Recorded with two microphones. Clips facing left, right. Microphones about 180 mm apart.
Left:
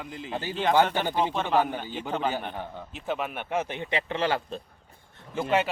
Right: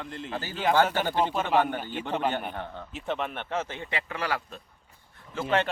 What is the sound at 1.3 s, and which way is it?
Speech, 10° right (ahead or behind).